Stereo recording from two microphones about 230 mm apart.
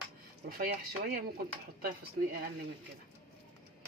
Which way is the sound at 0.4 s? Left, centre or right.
Right.